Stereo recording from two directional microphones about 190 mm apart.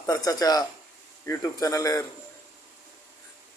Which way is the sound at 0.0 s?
20° left (ahead or behind).